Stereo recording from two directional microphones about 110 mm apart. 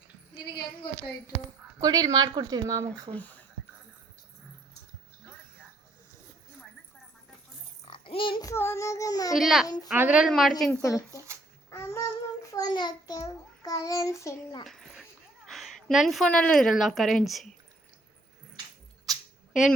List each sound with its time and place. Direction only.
1.8 s speech: 35° right (ahead or behind)
3.1 s speech: 15° left (ahead or behind)
7.9 s oink: 50° left (ahead or behind)
8.5 s child singing: 25° left (ahead or behind)
9.3 s a woman's voice: centre (ahead or behind)
9.6 s speech: 35° left (ahead or behind)
9.9 s a woman's voice: 15° right (ahead or behind)
10.2 s a woman's voice: centre (ahead or behind)
10.8 s a child's voice: 30° left (ahead or behind)
14.6 s a sound: centre (ahead or behind)
15.4 s a woman's voice: centre (ahead or behind)